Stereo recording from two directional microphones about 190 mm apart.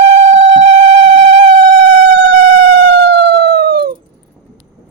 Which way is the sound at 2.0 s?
65° right (ahead or behind).